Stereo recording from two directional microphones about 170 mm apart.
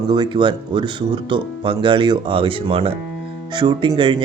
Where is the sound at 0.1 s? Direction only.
25° right (ahead or behind).